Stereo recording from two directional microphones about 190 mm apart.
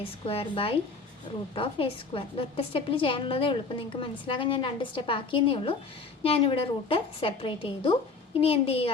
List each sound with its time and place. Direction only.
0.0 s a woman's voice: 30° left (ahead or behind)